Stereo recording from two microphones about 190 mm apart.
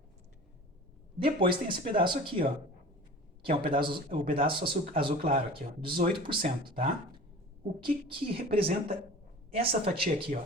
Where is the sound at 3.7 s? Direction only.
25° right (ahead or behind).